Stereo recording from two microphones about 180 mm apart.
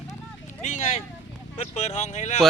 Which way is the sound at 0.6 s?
40° left (ahead or behind).